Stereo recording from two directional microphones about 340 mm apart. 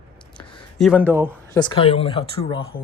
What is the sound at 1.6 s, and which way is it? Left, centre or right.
Speech, centre.